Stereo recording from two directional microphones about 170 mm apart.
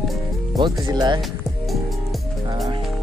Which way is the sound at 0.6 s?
25° right (ahead or behind).